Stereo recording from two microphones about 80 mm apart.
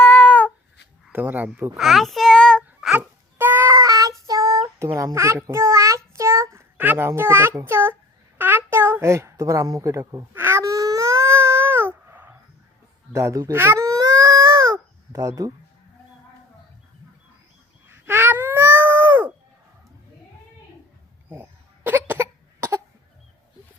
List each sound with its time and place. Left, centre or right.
0.0 s a sound: left
1.1 s a child's voice: right
1.8 s child singing: centre
3.3 s a sound: right
3.7 s child singing: right
6.7 s a child's voice: right
10.3 s baby cry: right
10.6 s baby cry: right
13.1 s a child's voice: right
13.7 s baby cry: right
17.8 s cat: right
21.8 s cough: right